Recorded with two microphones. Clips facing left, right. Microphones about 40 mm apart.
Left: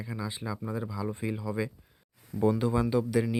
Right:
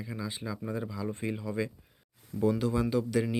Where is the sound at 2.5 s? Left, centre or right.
Centre.